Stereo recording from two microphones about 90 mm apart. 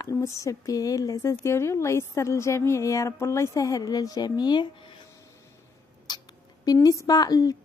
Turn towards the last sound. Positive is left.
turn(degrees=45)  # may be behind; listen again after turning